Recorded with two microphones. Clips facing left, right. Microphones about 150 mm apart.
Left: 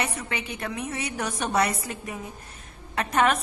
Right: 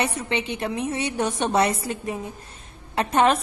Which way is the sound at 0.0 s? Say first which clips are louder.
Right 5 dB; 30° right (ahead or behind).